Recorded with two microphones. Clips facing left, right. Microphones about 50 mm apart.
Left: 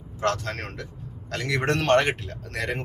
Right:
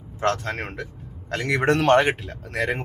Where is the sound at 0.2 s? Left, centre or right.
Right.